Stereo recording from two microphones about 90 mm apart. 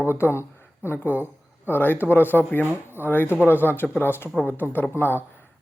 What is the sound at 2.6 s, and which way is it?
Speech, 20° right (ahead or behind).